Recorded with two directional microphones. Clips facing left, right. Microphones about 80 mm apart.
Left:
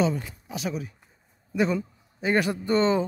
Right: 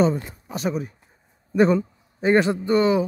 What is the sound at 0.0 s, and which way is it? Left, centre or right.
Speech, right.